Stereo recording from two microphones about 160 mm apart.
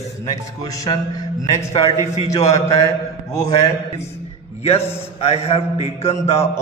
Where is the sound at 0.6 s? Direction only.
20° left (ahead or behind).